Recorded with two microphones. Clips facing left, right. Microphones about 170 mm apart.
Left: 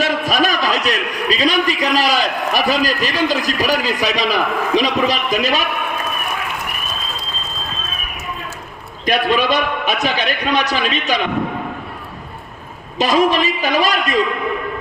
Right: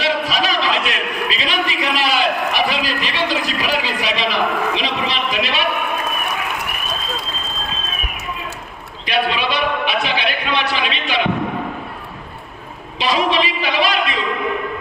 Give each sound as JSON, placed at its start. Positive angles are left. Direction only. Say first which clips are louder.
{"t": 0.0, "sound": "a sound", "louder": "left 2 dB", "side_deg": 50}
{"t": 9.0, "sound": "a man's voice", "louder": "left 4 dB", "side_deg": 45}
{"t": 13.0, "sound": "a man's voice", "louder": "left 3 dB", "side_deg": 45}